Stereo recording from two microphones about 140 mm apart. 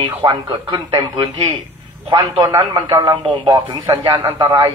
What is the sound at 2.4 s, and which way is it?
A man's voice, 25° right (ahead or behind).